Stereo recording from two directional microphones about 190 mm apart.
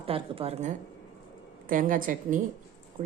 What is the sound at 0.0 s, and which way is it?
A woman's voice, 30° right (ahead or behind).